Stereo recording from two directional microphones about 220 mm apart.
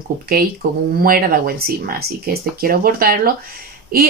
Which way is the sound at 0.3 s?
40° right (ahead or behind).